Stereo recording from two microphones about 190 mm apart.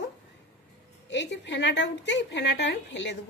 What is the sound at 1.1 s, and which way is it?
A woman's voice, 65° left (ahead or behind).